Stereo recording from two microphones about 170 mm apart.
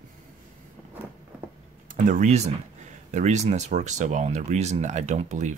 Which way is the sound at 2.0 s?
45° right (ahead or behind).